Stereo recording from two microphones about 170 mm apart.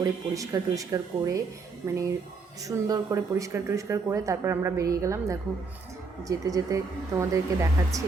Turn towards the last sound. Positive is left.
turn(degrees=-20)  # may be behind; listen again after turning